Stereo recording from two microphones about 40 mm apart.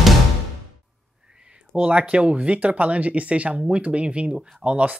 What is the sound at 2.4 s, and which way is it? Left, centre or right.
Speech, right.